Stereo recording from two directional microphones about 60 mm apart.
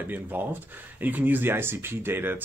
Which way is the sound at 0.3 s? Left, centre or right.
Right.